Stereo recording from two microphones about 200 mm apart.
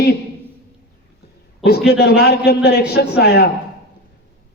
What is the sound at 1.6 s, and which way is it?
A man's voice, 50° left (ahead or behind).